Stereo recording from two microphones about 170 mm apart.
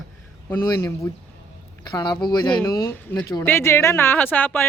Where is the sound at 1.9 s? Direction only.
25° left (ahead or behind); by 4.6 s 10° left (ahead or behind).